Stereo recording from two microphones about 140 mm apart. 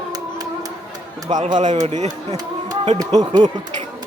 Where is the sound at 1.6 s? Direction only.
55° right (ahead or behind).